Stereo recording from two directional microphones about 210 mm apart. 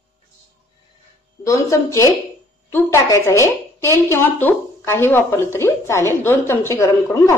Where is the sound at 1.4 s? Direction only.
15° left (ahead or behind).